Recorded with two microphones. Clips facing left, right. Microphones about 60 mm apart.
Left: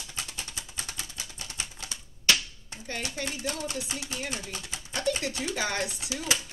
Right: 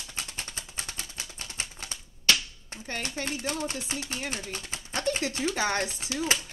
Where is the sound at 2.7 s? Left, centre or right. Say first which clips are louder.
Right 1 dB; right.